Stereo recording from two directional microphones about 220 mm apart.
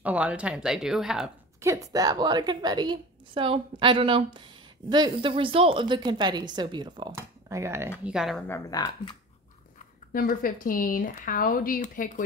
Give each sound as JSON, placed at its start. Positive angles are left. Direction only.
{"t": 0.0, "sound": "speech", "side_deg": -5}
{"t": 1.6, "sound": "a woman's voice", "side_deg": -15}
{"t": 8.5, "sound": "speech", "side_deg": 15}
{"t": 10.1, "sound": "speech", "side_deg": 40}